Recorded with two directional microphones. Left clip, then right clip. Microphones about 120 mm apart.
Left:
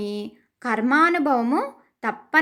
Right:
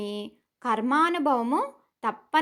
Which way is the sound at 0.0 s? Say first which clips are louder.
Left 4 dB; 40° left (ahead or behind).